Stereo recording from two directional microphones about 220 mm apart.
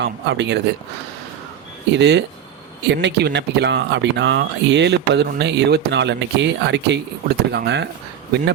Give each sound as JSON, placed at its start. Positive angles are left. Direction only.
{"t": 0.0, "sound": "speech", "side_deg": -50}
{"t": 1.9, "sound": "speech", "side_deg": -50}